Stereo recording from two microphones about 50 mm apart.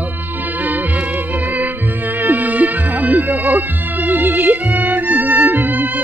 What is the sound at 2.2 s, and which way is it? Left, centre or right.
Music, right.